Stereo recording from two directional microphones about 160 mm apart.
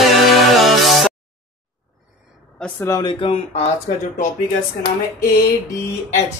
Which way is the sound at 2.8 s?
25° left (ahead or behind).